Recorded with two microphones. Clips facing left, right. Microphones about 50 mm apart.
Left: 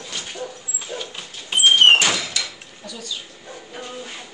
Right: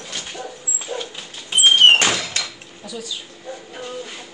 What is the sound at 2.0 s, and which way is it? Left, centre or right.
Door, right.